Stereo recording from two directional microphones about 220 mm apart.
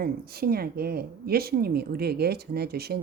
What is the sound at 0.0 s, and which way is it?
A woman's voice, 45° right (ahead or behind).